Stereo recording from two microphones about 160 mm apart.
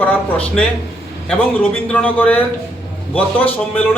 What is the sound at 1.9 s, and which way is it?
A man's voice, 10° left (ahead or behind).